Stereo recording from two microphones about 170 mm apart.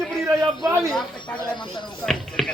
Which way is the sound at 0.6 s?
20° right (ahead or behind).